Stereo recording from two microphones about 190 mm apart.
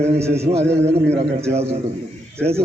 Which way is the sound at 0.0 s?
35° right (ahead or behind).